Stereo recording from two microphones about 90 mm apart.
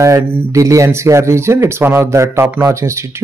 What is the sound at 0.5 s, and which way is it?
Speech, 35° right (ahead or behind).